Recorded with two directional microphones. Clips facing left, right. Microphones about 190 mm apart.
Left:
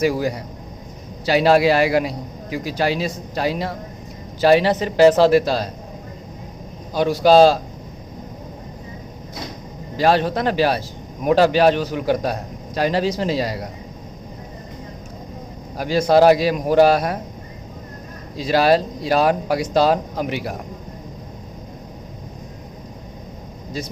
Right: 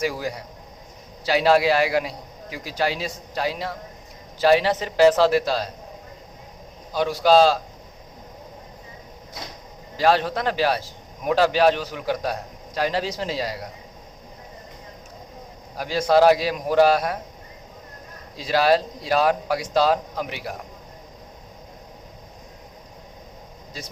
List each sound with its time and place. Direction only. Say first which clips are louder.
0.0 s a man's voice: left 7 dB; 60° left (ahead or behind)
6.9 s a man's voice: left 4 dB; 50° left (ahead or behind)
10.1 s a man's voice: left 3 dB; 50° left (ahead or behind)
15.8 s a man's voice: left 3 dB; 50° left (ahead or behind)
18.4 s a man's voice: left 3 dB; 50° left (ahead or behind)